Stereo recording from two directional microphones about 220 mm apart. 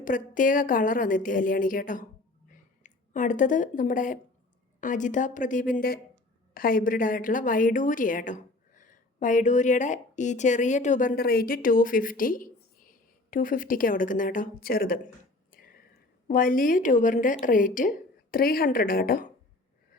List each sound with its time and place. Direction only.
0.0 s a woman's voice: 35° left (ahead or behind)
2.5 s a sound: 35° left (ahead or behind)
4.8 s a woman's voice: 35° left (ahead or behind)